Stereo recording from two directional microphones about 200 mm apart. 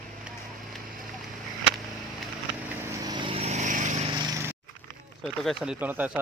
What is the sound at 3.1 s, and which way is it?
Vehicle, 25° right (ahead or behind).